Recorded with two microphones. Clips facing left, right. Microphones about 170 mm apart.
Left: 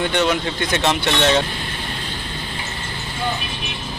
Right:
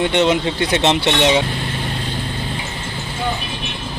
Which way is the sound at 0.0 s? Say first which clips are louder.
Right 4 dB; 20° right (ahead or behind).